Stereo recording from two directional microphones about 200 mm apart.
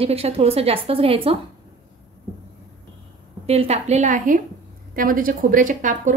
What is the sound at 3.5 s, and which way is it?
A woman's voice, 30° right (ahead or behind).